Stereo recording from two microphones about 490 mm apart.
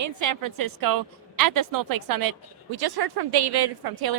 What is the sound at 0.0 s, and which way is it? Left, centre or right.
A woman's voice, right.